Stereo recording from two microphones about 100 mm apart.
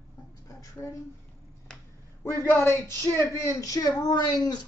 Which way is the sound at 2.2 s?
25° left (ahead or behind).